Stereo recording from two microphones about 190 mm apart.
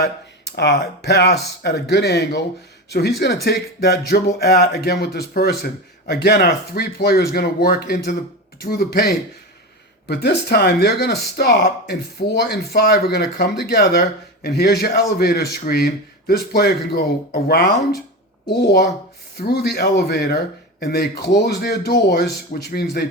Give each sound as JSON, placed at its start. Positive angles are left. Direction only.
{"t": 0.0, "sound": "speech", "side_deg": 60}
{"t": 3.4, "sound": "speech", "side_deg": 60}